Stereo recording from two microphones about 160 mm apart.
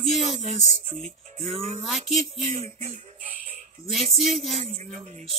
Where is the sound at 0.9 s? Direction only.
45° right (ahead or behind).